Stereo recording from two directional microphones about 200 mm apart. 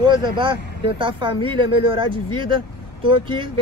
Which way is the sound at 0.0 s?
20° right (ahead or behind).